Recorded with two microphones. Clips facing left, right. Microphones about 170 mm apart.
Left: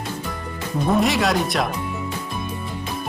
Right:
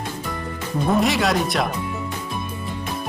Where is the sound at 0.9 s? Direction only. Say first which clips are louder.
Even; centre (ahead or behind).